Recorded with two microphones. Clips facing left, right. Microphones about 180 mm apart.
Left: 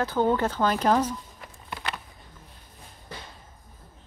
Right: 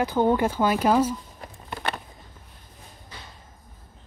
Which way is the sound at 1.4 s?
50° right (ahead or behind).